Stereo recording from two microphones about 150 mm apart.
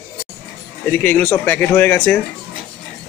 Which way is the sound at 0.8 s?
10° left (ahead or behind).